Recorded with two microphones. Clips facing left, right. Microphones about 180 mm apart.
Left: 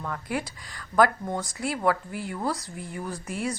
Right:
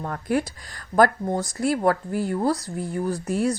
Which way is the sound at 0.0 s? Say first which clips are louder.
Right 6 dB; 45° right (ahead or behind).